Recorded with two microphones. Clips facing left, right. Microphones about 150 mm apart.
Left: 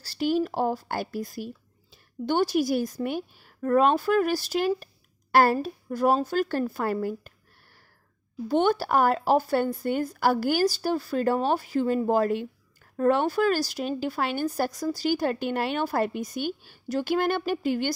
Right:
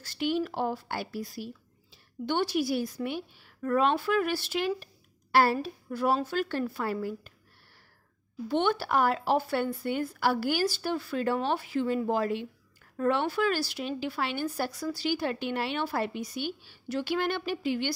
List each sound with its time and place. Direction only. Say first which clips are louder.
0.0 s speech: left 4 dB; 35° left (ahead or behind)
8.5 s speech: left 4 dB; 40° left (ahead or behind)